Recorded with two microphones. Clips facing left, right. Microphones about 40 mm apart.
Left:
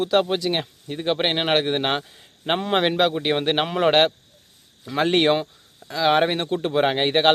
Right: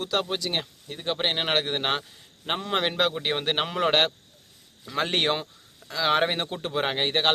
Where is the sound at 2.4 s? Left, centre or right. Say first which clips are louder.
Left 6 dB; left.